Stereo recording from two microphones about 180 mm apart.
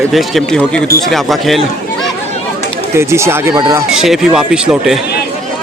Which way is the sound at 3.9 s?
5° right (ahead or behind).